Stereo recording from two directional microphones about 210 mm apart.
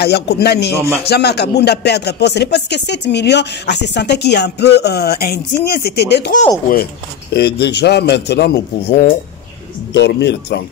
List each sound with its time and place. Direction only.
0.0 s speech: 50° left (ahead or behind)